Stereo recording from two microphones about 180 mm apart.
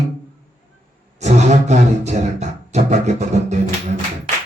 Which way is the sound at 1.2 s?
40° right (ahead or behind).